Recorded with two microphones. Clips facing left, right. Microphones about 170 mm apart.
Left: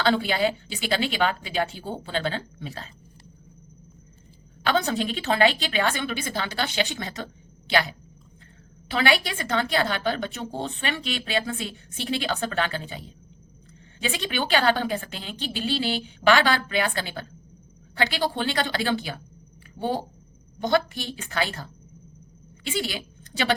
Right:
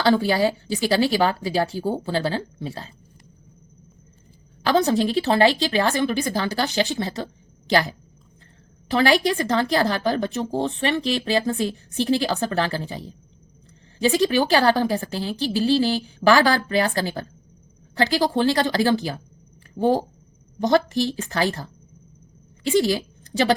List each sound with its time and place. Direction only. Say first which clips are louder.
0.2 s speech: right 4 dB; 35° right (ahead or behind)
4.6 s speech: right 5 dB; 35° right (ahead or behind)
14.0 s speech: right 9 dB; 35° right (ahead or behind)
20.7 s a woman's voice: right 4 dB; 40° right (ahead or behind)